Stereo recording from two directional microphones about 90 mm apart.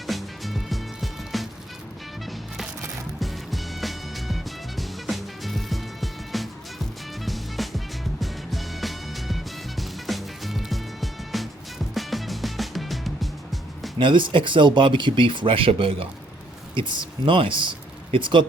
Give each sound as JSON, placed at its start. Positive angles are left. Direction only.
{"t": 0.1, "sound": "music", "side_deg": 0}
{"t": 3.2, "sound": "music", "side_deg": 0}
{"t": 14.0, "sound": "speech", "side_deg": -65}
{"t": 16.7, "sound": "speech", "side_deg": -60}